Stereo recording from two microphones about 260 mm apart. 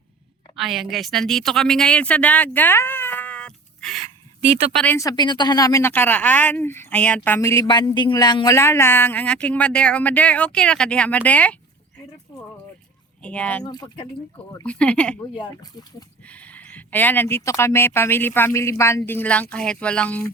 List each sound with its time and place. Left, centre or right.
0.5 s a woman's voice: centre
13.2 s speech: centre
13.7 s a woman's voice: centre
14.6 s speech: centre
15.4 s a woman's voice: centre